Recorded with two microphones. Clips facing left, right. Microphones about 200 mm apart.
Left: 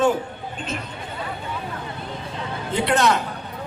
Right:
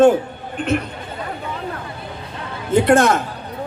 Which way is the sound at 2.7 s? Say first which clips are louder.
Right 6 dB; 50° right (ahead or behind).